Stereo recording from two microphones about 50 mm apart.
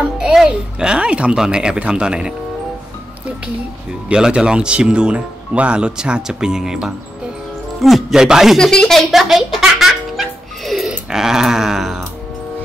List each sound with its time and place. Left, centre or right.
0.3 s a sound: centre
1.5 s speech: centre
4.1 s speech: centre
8.5 s speech: centre
9.1 s music: centre
10.9 s a sound: centre